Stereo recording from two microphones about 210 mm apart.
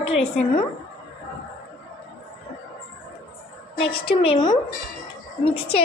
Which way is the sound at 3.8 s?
25° left (ahead or behind).